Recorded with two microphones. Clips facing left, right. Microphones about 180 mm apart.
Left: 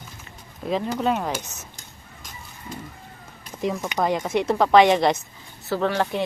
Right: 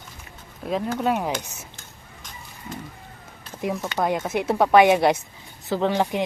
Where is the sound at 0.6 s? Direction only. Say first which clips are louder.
Even; centre (ahead or behind).